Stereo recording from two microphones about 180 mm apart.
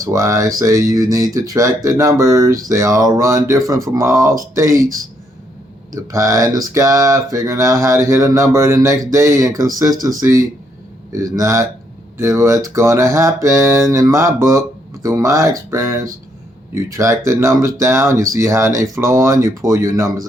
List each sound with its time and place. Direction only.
0.0 s speech: 20° right (ahead or behind)